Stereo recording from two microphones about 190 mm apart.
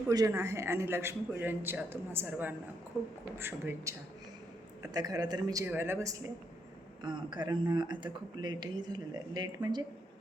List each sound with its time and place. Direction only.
0.1 s a man's voice: 15° right (ahead or behind)